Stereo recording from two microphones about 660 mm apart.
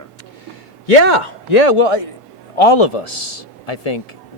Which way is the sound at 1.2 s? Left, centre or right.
Left.